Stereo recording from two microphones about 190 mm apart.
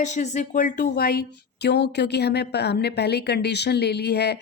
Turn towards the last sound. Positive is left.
turn(degrees=60)  # may be behind; listen again after turning